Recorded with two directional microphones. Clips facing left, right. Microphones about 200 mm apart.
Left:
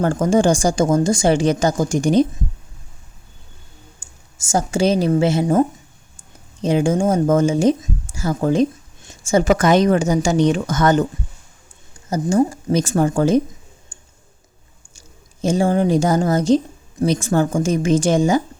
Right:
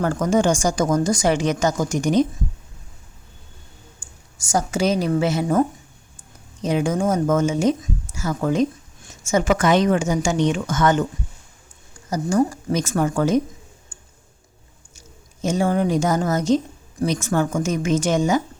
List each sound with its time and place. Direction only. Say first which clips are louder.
0.0 s speech: left 3 dB; 30° left (ahead or behind)
4.0 s a woman's voice: even; 25° left (ahead or behind)
12.1 s speech: left 3 dB; 25° left (ahead or behind)
13.9 s clicking: even; 25° left (ahead or behind)
14.9 s speech: right 1 dB; 30° left (ahead or behind)